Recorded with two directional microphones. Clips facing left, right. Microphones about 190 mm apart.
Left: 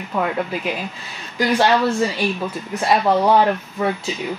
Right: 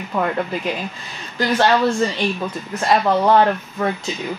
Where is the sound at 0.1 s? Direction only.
5° left (ahead or behind).